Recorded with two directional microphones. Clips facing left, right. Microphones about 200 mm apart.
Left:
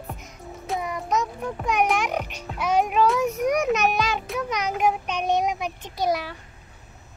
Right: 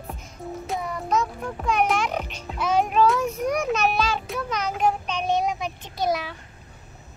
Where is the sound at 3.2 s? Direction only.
15° left (ahead or behind).